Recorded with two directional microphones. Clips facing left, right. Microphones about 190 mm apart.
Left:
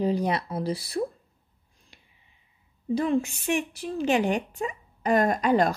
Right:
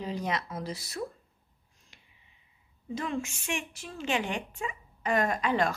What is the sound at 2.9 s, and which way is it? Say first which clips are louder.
Speech: left 9 dB; 35° left (ahead or behind).